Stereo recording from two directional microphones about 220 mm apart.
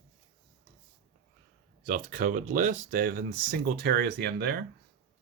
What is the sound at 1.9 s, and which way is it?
Speech, 40° right (ahead or behind).